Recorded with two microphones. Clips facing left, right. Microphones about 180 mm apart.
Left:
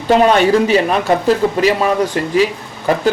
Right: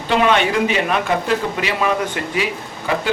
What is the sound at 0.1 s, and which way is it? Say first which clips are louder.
Speech: left 6 dB; 40° left (ahead or behind).